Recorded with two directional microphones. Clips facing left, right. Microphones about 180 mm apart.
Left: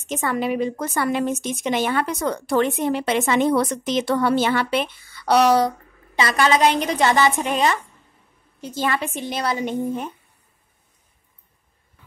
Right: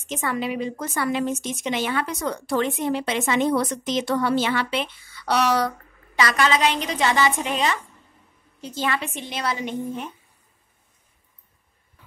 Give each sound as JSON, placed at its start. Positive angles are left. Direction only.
{"t": 0.1, "sound": "a woman's voice", "side_deg": 50}
{"t": 6.1, "sound": "a woman's voice", "side_deg": 30}